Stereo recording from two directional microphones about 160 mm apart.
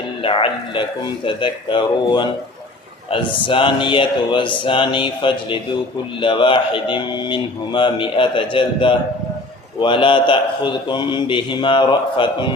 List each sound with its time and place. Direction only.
0.2 s speech: 35° left (ahead or behind)